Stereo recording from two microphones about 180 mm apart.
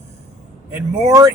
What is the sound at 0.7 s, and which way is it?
Speech, 15° right (ahead or behind).